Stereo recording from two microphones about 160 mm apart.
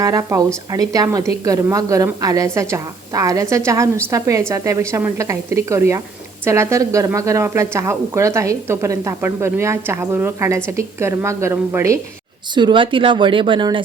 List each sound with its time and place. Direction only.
0.0 s a woman's voice: 20° right (ahead or behind)
12.5 s speech: 30° right (ahead or behind)